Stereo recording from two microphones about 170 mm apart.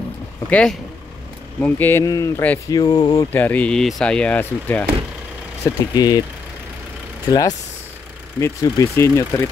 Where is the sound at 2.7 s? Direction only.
25° left (ahead or behind).